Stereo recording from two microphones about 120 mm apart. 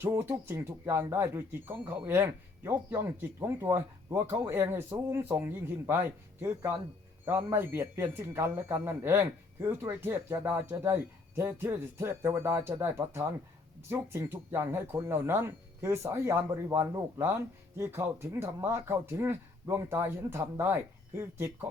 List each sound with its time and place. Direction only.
0.0 s a man's voice: 20° right (ahead or behind)